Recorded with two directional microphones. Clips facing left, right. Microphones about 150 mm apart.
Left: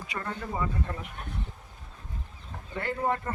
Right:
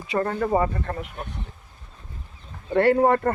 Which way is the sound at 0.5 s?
70° right (ahead or behind).